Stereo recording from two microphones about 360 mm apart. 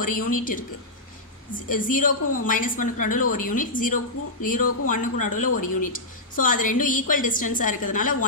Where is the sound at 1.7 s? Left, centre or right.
Left.